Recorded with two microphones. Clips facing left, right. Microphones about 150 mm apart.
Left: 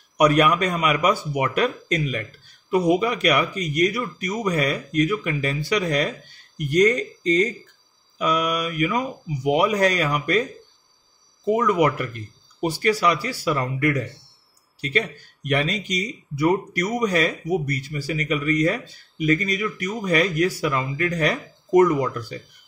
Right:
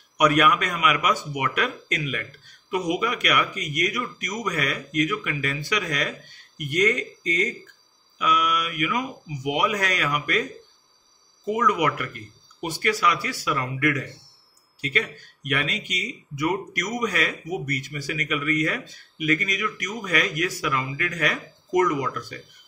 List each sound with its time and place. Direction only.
0.2 s speech: 30° left (ahead or behind)